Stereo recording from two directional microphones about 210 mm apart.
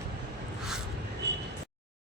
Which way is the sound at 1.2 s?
55° right (ahead or behind).